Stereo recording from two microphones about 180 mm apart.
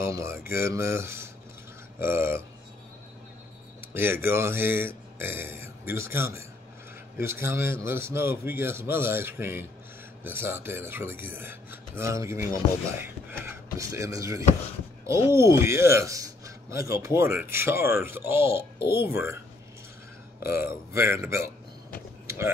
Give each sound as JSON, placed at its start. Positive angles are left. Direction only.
{"t": 0.0, "sound": "speech", "side_deg": -15}
{"t": 3.9, "sound": "speech", "side_deg": -10}
{"t": 20.4, "sound": "speech", "side_deg": -15}